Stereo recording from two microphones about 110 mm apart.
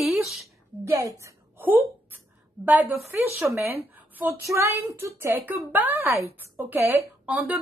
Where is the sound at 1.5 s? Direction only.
20° right (ahead or behind).